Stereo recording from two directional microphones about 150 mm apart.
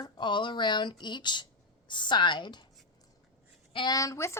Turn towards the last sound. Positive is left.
turn(degrees=20)  # may be behind; listen again after turning